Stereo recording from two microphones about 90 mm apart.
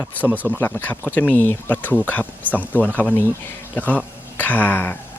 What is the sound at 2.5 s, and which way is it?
Speech, 20° right (ahead or behind).